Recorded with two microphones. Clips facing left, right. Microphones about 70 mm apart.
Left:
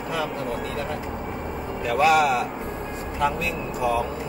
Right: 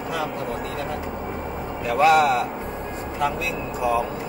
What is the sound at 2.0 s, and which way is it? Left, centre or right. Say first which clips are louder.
Speech: right 2 dB; right.